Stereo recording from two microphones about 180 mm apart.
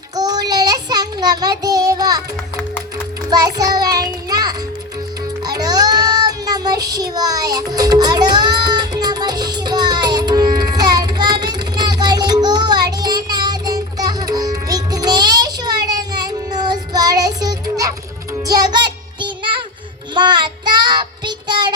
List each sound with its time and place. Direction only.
0.2 s child singing: 20° right (ahead or behind)
3.2 s music: 20° right (ahead or behind)
20.1 s child singing: 25° right (ahead or behind)